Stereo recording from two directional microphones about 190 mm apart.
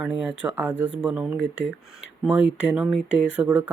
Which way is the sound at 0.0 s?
5° right (ahead or behind).